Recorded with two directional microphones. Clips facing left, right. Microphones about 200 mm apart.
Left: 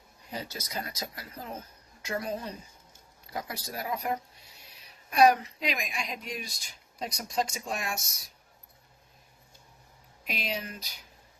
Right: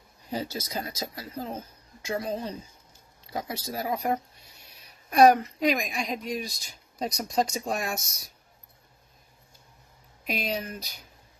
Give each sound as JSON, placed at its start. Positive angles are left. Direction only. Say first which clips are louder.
{"t": 0.3, "sound": "speech", "louder": "right 6 dB", "side_deg": -30}
{"t": 5.1, "sound": "speech", "louder": "right 4 dB", "side_deg": -45}
{"t": 10.2, "sound": "speech", "louder": "right 5 dB", "side_deg": -40}